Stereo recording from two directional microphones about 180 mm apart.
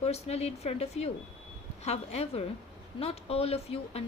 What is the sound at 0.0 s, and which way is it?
Speech, 35° left (ahead or behind).